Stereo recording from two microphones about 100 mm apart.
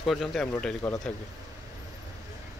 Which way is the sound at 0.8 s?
25° left (ahead or behind).